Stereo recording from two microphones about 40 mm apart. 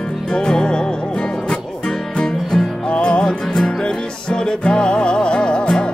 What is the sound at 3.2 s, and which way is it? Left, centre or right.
Music, centre.